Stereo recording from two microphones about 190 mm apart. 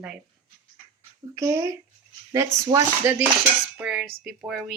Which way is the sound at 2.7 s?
25° right (ahead or behind).